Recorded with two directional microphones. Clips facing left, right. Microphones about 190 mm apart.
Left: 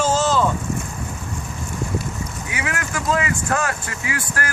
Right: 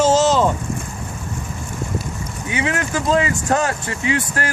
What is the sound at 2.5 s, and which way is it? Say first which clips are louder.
Speech: right 7 dB; 25° right (ahead or behind).